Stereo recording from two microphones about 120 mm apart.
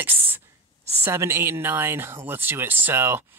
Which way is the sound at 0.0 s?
15° right (ahead or behind).